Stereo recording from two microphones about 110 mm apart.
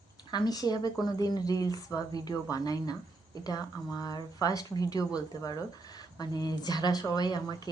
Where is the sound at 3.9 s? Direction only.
35° left (ahead or behind).